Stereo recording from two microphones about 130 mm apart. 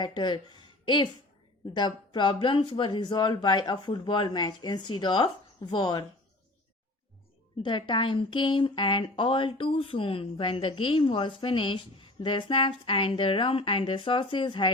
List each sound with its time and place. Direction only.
0.0 s a woman's voice: 35° left (ahead or behind)
7.6 s a woman's voice: 40° left (ahead or behind)